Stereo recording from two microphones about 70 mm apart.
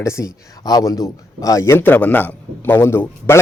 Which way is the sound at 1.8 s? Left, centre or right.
Left.